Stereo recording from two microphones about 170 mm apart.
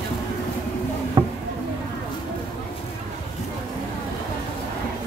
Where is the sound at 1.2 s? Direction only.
25° right (ahead or behind).